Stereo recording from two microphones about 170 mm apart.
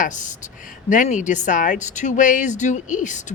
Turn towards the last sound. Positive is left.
turn(degrees=45)  # may be behind; listen again after turning